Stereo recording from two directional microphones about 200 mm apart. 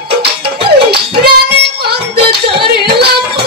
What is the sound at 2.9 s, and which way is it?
Music, 55° right (ahead or behind).